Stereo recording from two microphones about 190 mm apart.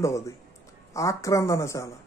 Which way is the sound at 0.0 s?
15° left (ahead or behind).